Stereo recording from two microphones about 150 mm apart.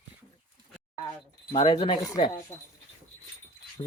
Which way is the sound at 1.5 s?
35° left (ahead or behind).